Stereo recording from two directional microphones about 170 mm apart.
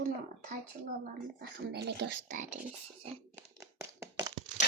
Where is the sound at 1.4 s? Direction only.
80° right.